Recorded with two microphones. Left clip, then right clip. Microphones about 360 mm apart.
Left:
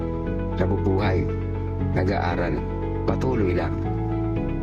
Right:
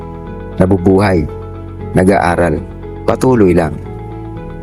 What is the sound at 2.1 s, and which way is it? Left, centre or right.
Speech, right.